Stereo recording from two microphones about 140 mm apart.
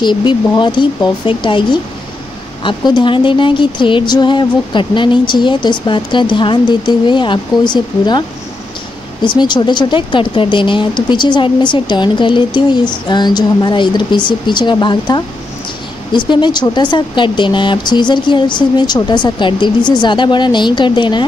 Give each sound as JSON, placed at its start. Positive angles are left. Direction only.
{"t": 0.0, "sound": "speech", "side_deg": 35}
{"t": 9.2, "sound": "speech", "side_deg": 35}